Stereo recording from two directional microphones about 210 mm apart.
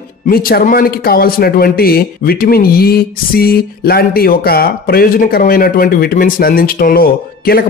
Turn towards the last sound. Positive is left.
turn(degrees=45)  # may be behind; listen again after turning